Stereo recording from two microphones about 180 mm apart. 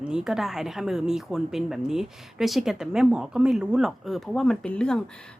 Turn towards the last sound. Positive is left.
turn(degrees=5)  # may be behind; listen again after turning